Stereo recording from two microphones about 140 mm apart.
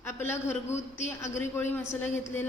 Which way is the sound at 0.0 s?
15° left (ahead or behind).